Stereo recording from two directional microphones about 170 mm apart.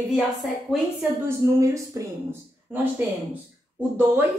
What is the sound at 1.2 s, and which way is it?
Speech, 15° right (ahead or behind).